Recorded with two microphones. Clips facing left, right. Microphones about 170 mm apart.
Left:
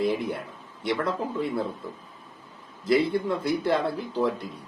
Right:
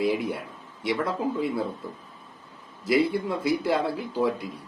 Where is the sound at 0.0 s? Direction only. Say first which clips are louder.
Right 1 dB; 5° right (ahead or behind).